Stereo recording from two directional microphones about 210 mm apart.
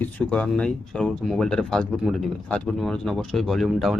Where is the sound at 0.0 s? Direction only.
5° left (ahead or behind).